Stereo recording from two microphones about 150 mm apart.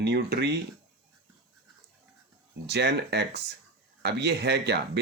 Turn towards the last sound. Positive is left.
turn(degrees=-90)